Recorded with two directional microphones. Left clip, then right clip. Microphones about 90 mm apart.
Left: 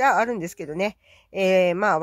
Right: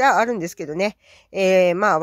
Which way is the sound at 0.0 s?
30° right (ahead or behind).